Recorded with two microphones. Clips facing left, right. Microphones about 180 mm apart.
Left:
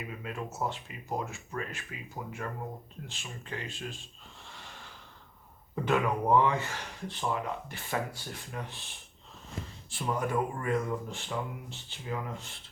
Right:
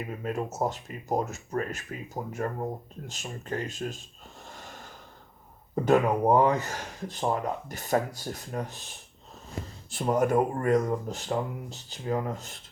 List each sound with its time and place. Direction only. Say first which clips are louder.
0.0 s speech: right 7 dB; 45° right (ahead or behind)
4.4 s snort: right 5 dB; 45° right (ahead or behind)
5.7 s speech: right 6 dB; 40° right (ahead or behind)
9.9 s speech: right 7 dB; 45° right (ahead or behind)